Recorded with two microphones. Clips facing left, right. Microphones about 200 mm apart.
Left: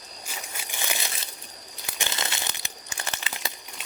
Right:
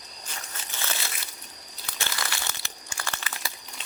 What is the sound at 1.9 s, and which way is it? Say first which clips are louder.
Crumpling: left 1 dB; 15° left (ahead or behind).